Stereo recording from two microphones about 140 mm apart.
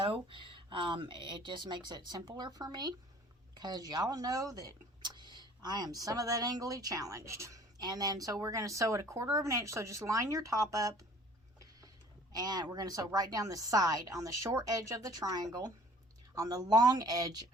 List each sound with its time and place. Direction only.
0.0 s speech: 35° right (ahead or behind)
12.3 s speech: 30° right (ahead or behind)